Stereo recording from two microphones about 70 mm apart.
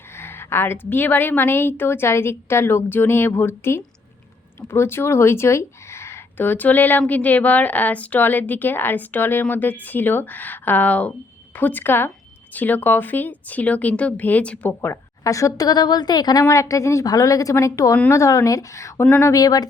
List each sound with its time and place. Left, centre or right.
0.2 s a woman's voice: left
14.7 s a woman's voice: left
15.2 s a woman's voice: left
16.4 s speech: left
19.2 s speech: left